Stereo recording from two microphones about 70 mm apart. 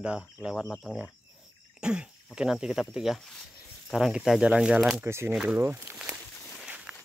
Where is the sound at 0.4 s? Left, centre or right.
Centre.